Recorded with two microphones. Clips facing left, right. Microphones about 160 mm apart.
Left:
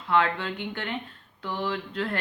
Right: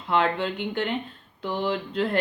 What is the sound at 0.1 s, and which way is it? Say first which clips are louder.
Speech: right 1 dB; 25° right (ahead or behind).